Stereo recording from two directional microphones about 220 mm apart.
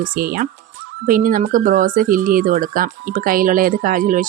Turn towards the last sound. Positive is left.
turn(degrees=-40)  # may be behind; listen again after turning